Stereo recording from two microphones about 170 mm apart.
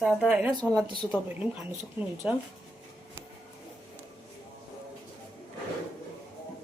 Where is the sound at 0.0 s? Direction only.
5° right (ahead or behind).